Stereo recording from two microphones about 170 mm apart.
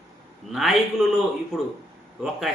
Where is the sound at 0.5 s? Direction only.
Centre (ahead or behind).